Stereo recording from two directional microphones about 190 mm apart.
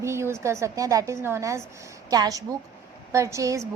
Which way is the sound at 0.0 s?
15° right (ahead or behind).